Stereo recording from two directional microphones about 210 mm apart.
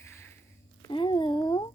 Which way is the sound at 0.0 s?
10° left (ahead or behind).